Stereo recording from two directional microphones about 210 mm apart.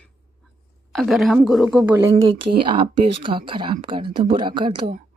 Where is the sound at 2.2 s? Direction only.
25° right (ahead or behind).